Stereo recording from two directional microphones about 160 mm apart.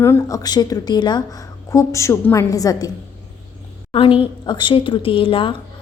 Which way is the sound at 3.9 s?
35° left (ahead or behind).